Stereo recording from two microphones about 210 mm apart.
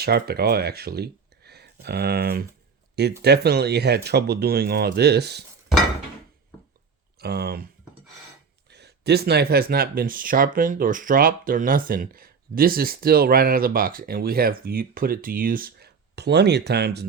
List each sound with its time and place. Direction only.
0.0 s speech: 50° right (ahead or behind)
7.2 s speech: 50° right (ahead or behind)
8.7 s speech: 50° right (ahead or behind)